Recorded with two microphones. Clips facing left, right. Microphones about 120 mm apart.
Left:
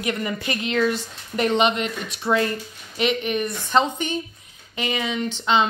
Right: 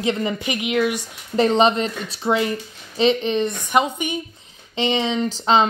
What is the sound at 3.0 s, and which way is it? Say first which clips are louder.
Speech: right 4 dB; 30° right (ahead or behind).